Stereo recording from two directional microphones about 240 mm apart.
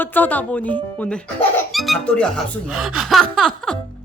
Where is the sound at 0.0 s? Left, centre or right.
Centre.